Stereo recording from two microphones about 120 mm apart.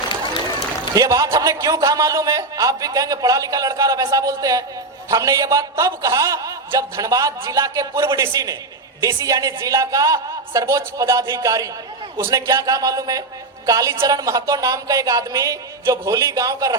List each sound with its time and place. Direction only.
0.9 s a man's voice: 30° right (ahead or behind)